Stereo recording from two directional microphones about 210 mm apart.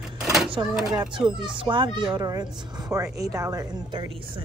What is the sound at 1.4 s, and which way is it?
Speech, 20° right (ahead or behind).